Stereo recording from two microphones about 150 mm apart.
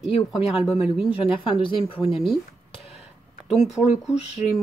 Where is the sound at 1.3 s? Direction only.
35° left (ahead or behind).